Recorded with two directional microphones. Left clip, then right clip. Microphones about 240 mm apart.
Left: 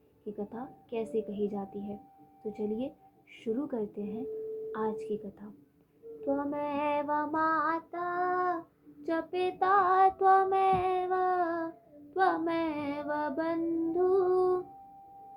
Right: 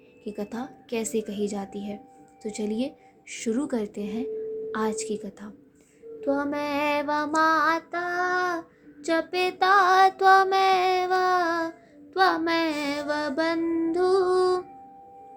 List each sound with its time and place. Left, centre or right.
0.3 s child singing: right